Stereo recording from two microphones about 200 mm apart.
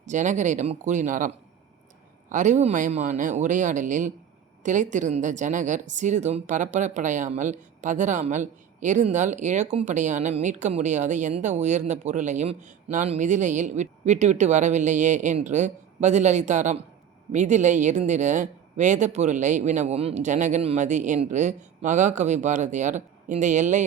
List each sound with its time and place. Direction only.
0.0 s a woman's voice: 40° right (ahead or behind)
2.3 s a woman's voice: 35° right (ahead or behind)